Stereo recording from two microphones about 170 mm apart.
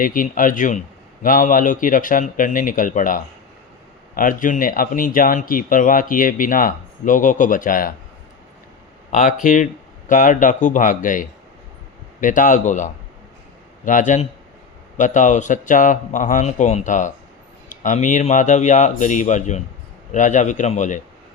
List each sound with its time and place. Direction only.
0.0 s speech: 55° left (ahead or behind)
9.1 s speech: 55° left (ahead or behind)